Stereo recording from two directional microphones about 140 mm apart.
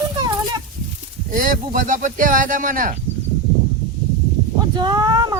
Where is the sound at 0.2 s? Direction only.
30° right (ahead or behind).